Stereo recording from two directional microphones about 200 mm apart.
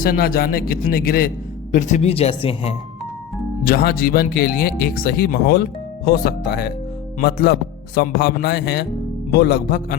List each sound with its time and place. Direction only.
0.0 s speech: 45° left (ahead or behind)
1.7 s speech: 35° left (ahead or behind)
3.6 s speech: 50° left (ahead or behind)